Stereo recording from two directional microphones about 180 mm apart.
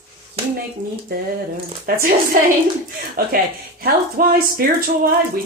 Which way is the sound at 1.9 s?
55° right (ahead or behind).